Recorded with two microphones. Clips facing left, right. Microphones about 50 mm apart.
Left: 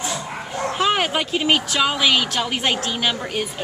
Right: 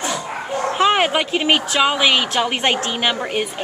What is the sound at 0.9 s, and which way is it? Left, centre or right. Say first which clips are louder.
A woman's voice: right 4 dB; right.